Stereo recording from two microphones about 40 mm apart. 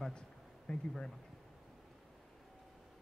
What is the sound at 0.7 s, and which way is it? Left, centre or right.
Speech, left.